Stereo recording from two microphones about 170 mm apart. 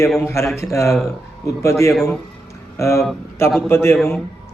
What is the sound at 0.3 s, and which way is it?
A man's voice, 15° left (ahead or behind).